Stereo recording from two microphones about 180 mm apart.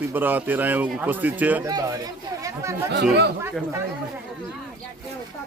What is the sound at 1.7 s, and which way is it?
Speech, 20° right (ahead or behind).